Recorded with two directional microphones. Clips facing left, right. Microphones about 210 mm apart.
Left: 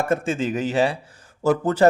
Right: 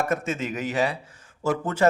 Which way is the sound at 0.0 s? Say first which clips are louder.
Left 4 dB; 30° left (ahead or behind).